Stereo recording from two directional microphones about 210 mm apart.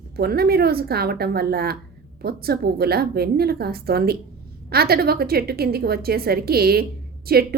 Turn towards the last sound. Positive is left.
turn(degrees=-45)  # may be behind; listen again after turning